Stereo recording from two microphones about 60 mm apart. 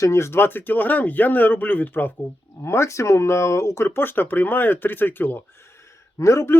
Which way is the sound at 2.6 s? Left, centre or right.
Left.